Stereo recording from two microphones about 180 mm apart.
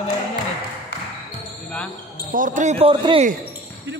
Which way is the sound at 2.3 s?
45° right (ahead or behind).